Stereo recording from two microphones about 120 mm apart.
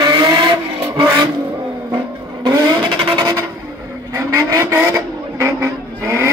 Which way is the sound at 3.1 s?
30° right (ahead or behind).